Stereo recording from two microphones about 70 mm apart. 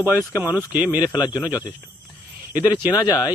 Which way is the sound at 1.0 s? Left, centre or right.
Left.